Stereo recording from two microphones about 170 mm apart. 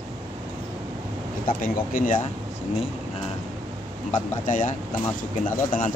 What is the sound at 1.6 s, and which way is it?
Speech, 55° left (ahead or behind).